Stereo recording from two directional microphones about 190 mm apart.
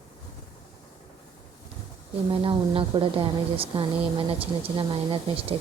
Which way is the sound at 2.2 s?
25° right (ahead or behind).